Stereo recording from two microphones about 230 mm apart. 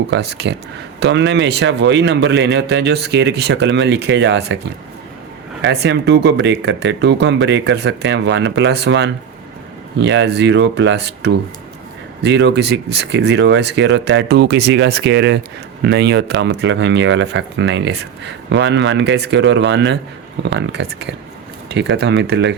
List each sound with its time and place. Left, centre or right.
0.1 s speech: right
5.6 s speech: right